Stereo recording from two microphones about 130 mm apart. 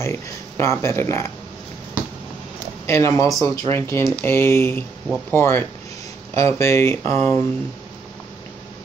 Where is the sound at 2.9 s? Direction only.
20° left (ahead or behind).